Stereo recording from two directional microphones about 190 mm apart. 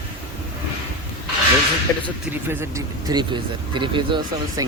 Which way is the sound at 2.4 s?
15° right (ahead or behind).